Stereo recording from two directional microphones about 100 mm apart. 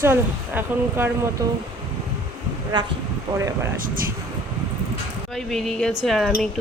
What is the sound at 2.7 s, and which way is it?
Speech, 50° right (ahead or behind).